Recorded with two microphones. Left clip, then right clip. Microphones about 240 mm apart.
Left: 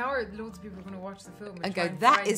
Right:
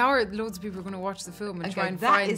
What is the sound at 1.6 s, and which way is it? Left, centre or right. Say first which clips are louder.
Speech: left 1 dB; left.